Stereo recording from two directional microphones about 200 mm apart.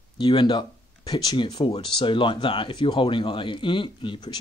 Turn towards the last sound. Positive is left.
turn(degrees=20)  # may be behind; listen again after turning